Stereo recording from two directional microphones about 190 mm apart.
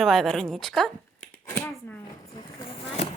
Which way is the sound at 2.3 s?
30° left (ahead or behind).